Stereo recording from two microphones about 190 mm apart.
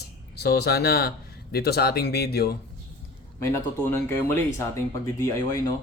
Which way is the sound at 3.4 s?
15° left (ahead or behind).